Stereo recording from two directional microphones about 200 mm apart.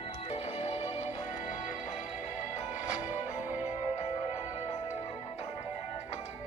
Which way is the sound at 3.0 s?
10° right (ahead or behind).